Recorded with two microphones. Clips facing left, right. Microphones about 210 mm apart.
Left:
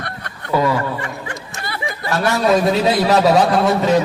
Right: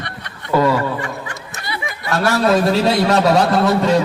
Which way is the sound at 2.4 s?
Centre (ahead or behind).